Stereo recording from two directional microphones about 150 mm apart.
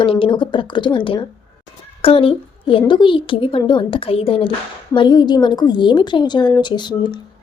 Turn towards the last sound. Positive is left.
turn(degrees=30)  # may be behind; listen again after turning